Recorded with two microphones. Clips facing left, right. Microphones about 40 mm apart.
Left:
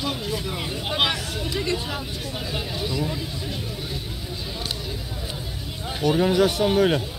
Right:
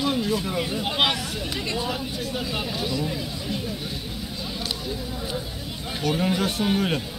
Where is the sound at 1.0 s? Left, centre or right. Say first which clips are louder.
Even; right.